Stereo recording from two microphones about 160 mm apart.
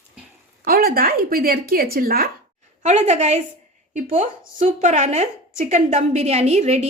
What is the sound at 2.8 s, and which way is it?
A woman's voice, 45° right (ahead or behind).